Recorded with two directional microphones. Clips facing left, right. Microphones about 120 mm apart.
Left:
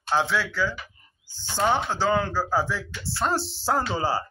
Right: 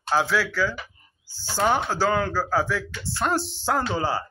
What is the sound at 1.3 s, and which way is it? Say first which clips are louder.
Speech: right 3 dB; 20° left (ahead or behind).